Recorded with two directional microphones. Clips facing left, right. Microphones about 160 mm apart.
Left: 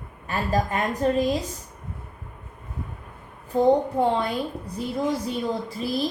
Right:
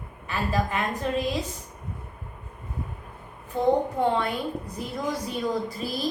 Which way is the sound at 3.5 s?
35° left (ahead or behind).